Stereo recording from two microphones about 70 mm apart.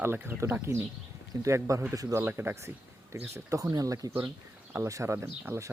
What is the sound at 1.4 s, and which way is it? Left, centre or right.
Speech, right.